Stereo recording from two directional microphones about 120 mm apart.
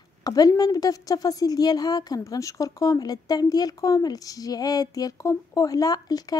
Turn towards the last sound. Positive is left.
turn(degrees=30)  # may be behind; listen again after turning